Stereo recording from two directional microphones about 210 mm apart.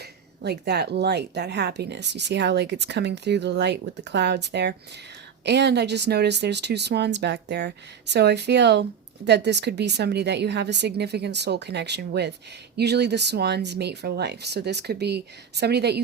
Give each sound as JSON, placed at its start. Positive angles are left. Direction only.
{"t": 0.4, "sound": "speech", "side_deg": -50}